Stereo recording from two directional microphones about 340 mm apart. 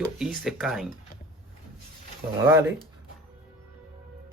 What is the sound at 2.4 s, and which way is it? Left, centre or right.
Speech, centre.